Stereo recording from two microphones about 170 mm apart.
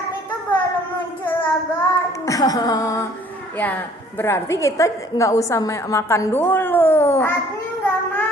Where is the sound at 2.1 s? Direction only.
20° left (ahead or behind).